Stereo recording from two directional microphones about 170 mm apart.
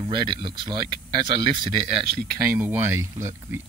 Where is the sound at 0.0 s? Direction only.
25° right (ahead or behind).